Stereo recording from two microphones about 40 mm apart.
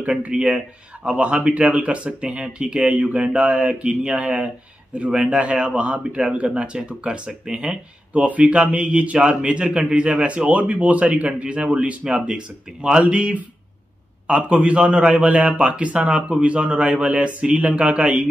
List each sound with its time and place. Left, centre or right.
0.3 s a man's voice: centre
1.0 s a man's voice: right
13.0 s speech: right